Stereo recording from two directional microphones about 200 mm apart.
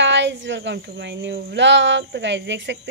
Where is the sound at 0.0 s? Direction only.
65° right (ahead or behind).